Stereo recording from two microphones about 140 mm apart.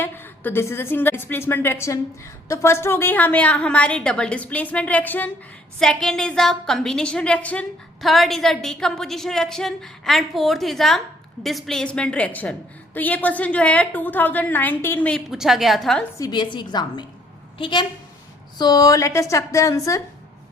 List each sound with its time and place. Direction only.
0.0 s a woman's voice: 15° left (ahead or behind)
15.3 s a woman's voice: centre (ahead or behind)
16.1 s a woman's voice: 30° left (ahead or behind)